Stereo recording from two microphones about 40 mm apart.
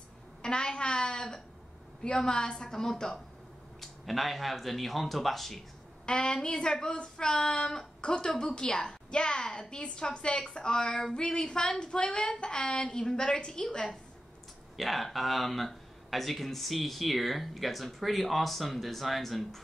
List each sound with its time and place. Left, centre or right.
0.4 s a sound: left
2.0 s a woman's voice: left
3.8 s speech: centre
6.0 s speech: left
14.8 s speech: centre